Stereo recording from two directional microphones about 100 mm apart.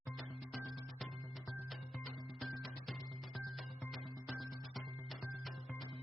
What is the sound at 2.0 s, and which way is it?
Music, centre (ahead or behind).